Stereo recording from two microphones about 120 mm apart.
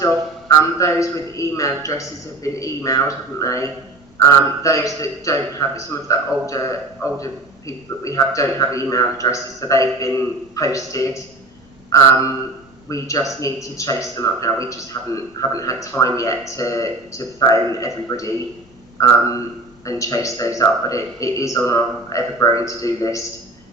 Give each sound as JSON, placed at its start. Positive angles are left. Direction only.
{"t": 0.0, "sound": "a man's voice", "side_deg": 25}